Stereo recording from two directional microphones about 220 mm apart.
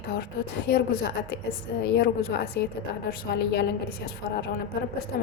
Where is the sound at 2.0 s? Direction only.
50° left (ahead or behind).